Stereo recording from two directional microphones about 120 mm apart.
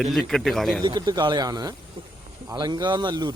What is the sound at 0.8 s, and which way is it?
Speech, 40° right (ahead or behind).